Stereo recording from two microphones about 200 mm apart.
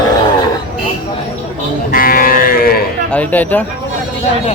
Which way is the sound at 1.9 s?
45° left (ahead or behind).